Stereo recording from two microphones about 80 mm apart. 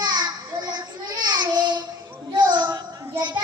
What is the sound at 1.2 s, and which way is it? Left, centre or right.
Child singing, right.